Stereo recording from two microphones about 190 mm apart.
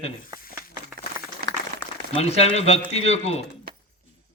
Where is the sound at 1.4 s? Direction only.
50° right (ahead or behind).